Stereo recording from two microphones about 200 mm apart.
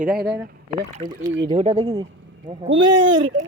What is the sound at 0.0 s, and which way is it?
Speech, 50° right (ahead or behind).